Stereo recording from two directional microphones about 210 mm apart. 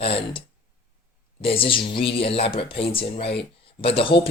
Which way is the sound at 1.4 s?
25° left (ahead or behind).